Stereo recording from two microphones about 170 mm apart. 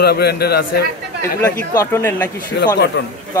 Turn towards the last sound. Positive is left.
turn(degrees=80)